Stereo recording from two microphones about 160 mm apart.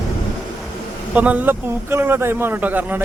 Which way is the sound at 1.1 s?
10° right (ahead or behind).